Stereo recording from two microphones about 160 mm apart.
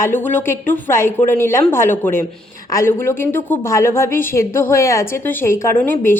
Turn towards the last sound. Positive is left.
turn(degrees=10)  # may be behind; listen again after turning